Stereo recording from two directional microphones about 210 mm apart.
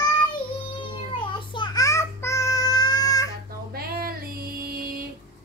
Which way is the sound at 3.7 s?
45° right (ahead or behind).